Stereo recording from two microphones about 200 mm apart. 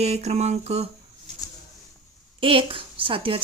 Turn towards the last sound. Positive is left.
turn(degrees=-25)  # may be behind; listen again after turning